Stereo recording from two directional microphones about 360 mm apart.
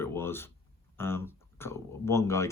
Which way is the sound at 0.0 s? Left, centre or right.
Centre.